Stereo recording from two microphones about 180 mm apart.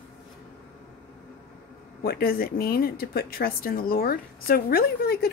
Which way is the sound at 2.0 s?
55° left (ahead or behind).